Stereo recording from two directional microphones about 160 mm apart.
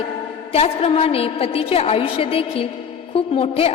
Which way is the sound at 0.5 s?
40° left (ahead or behind).